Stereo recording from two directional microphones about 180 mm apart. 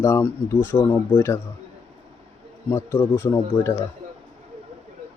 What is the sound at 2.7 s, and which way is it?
Speech, 15° left (ahead or behind).